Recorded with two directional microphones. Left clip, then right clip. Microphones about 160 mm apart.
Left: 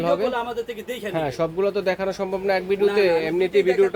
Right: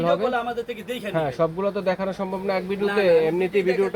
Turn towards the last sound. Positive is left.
turn(degrees=10)  # may be behind; listen again after turning